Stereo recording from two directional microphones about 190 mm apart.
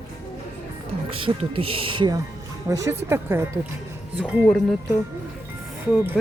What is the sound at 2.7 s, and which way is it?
Speech, 15° right (ahead or behind).